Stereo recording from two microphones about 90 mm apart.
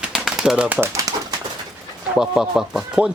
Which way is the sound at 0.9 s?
40° right (ahead or behind).